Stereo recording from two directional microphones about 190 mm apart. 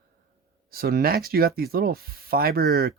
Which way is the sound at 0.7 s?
50° right (ahead or behind).